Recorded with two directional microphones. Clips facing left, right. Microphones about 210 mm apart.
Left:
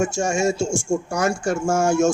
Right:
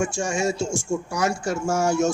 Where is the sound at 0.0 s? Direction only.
45° left (ahead or behind).